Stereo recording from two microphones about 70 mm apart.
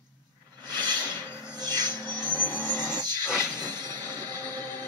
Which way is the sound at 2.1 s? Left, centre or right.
Left.